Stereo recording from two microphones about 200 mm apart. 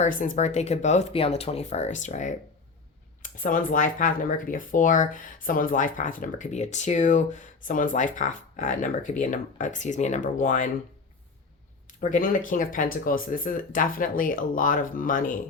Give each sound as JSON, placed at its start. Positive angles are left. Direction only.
{"t": 0.0, "sound": "speech", "side_deg": 40}
{"t": 11.9, "sound": "speech", "side_deg": 40}